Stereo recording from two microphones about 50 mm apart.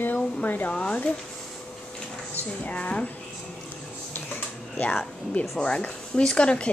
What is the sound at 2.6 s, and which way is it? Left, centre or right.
Speech, left.